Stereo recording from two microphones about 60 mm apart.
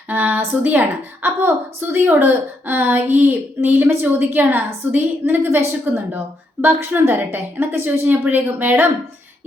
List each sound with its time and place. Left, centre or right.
0.1 s a woman's voice: right